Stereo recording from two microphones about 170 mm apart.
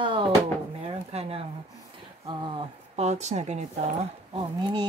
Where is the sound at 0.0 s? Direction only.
30° right (ahead or behind).